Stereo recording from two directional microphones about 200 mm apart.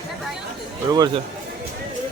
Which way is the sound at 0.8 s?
20° right (ahead or behind).